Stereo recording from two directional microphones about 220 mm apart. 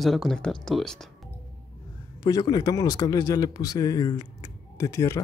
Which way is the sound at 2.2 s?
15° left (ahead or behind).